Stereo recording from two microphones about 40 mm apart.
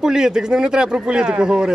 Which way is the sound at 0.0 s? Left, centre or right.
Centre.